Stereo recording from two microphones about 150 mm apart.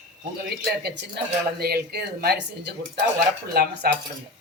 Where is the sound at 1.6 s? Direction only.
90° right.